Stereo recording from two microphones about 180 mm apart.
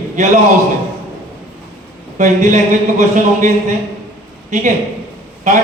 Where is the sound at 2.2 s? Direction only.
40° right (ahead or behind).